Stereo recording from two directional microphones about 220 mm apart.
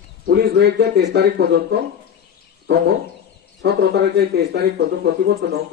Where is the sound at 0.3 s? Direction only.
50° right (ahead or behind).